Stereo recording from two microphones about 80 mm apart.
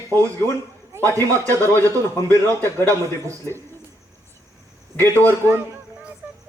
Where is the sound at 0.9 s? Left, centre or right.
Right.